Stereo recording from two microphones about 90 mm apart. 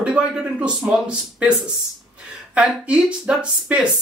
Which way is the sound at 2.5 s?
15° right (ahead or behind).